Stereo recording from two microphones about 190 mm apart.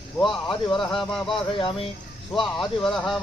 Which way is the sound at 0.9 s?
Centre (ahead or behind).